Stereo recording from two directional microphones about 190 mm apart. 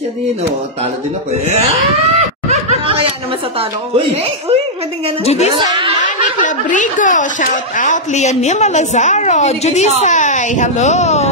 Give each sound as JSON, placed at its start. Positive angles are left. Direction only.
{"t": 2.1, "sound": "snicker", "side_deg": -35}
{"t": 3.5, "sound": "speech", "side_deg": -30}
{"t": 5.2, "sound": "speech", "side_deg": 35}
{"t": 5.9, "sound": "speech", "side_deg": 45}